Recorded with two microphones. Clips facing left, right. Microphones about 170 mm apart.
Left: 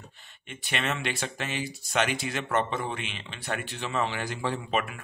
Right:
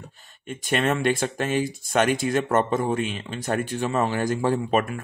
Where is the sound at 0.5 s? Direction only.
45° right (ahead or behind).